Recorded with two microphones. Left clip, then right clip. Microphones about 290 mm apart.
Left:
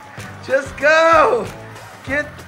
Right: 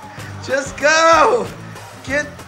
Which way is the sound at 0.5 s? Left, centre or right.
Centre.